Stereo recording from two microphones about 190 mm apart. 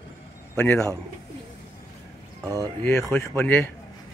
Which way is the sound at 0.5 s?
10° left (ahead or behind).